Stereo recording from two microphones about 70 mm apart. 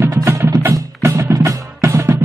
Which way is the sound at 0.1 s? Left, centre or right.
Right.